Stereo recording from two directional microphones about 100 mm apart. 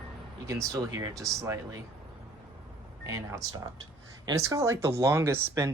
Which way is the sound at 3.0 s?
30° right (ahead or behind).